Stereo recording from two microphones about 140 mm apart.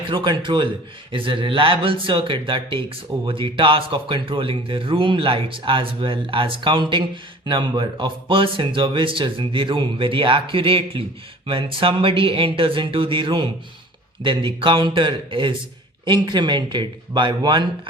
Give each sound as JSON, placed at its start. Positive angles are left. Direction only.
{"t": 0.1, "sound": "speech", "side_deg": -35}